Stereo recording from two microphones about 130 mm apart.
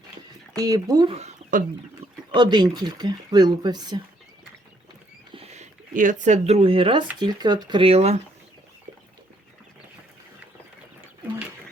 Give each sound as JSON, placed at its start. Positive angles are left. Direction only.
{"t": 0.5, "sound": "speech", "side_deg": -30}
{"t": 1.1, "sound": "bird", "side_deg": -60}
{"t": 2.3, "sound": "speech", "side_deg": -35}
{"t": 5.3, "sound": "speech", "side_deg": -55}
{"t": 7.2, "sound": "speech", "side_deg": -30}